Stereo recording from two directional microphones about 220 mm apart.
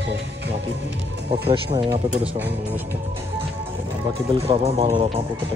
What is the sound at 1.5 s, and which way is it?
Speech, 20° right (ahead or behind).